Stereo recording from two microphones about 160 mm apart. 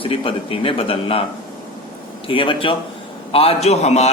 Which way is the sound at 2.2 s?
35° left (ahead or behind).